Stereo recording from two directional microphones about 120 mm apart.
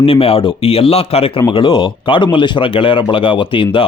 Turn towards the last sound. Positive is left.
turn(degrees=45)  # may be behind; listen again after turning